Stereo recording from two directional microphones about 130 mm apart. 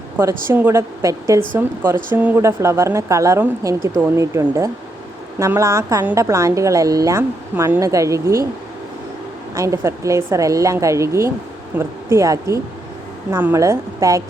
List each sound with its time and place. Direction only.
0.4 s a woman's voice: 15° right (ahead or behind)
9.6 s a woman's voice: 25° right (ahead or behind)